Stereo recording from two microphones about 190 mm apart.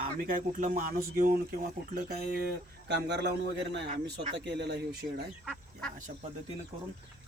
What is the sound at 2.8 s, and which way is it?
Speech, 65° right (ahead or behind).